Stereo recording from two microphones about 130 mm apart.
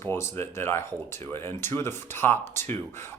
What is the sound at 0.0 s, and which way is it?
Speech, 20° left (ahead or behind).